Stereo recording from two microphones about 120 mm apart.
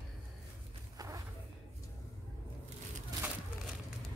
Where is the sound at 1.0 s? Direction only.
30° right (ahead or behind).